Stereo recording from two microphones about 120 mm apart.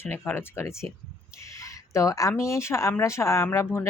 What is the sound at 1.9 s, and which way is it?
Speech, 25° left (ahead or behind).